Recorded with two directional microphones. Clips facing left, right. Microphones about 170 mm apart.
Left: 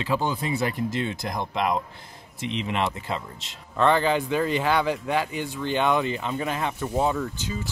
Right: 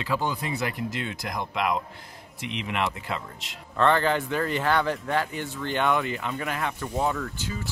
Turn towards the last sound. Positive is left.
turn(degrees=20)  # may be behind; listen again after turning